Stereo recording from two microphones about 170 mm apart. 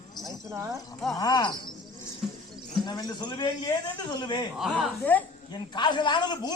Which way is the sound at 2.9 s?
25° left (ahead or behind).